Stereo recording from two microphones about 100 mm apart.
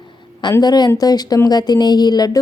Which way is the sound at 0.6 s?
40° left (ahead or behind).